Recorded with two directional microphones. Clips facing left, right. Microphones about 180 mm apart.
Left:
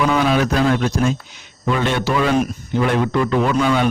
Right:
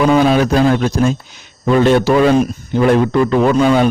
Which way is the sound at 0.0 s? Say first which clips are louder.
Right 5 dB; 35° right (ahead or behind).